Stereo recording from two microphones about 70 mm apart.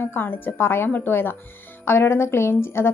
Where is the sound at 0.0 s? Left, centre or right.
Left.